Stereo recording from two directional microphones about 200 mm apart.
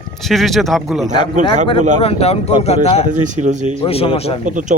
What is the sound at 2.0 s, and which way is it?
A man's voice, 30° left (ahead or behind).